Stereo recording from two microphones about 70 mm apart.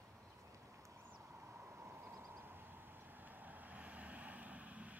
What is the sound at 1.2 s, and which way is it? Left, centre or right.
Vehicle, right.